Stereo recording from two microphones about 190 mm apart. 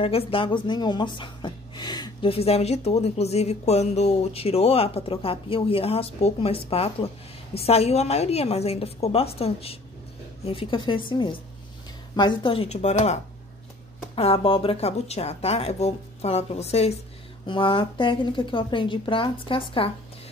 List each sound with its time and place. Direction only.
0.0 s a woman's voice: 30° left (ahead or behind)